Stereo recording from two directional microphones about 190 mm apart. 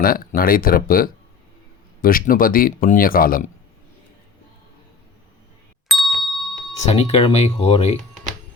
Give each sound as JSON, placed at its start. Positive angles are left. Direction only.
{"t": 0.0, "sound": "speech", "side_deg": 50}
{"t": 5.9, "sound": "ding", "side_deg": 0}
{"t": 6.8, "sound": "speech", "side_deg": 30}